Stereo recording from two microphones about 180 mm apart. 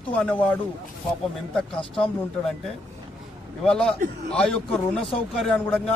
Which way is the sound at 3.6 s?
5° left (ahead or behind).